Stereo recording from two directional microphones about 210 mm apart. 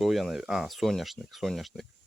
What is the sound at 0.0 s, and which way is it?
Speech, centre (ahead or behind).